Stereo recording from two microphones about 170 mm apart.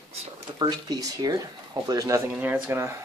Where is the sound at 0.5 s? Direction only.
25° right (ahead or behind).